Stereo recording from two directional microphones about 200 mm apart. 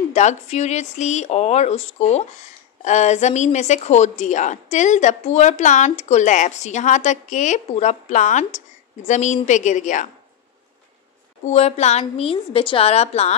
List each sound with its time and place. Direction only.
0.1 s speech: 35° left (ahead or behind)
11.4 s speech: 35° left (ahead or behind)